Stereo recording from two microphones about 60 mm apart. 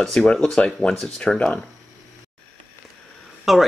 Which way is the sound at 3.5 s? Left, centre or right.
Centre.